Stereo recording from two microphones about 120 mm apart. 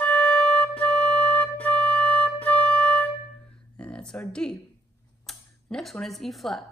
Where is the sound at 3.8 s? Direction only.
10° left (ahead or behind).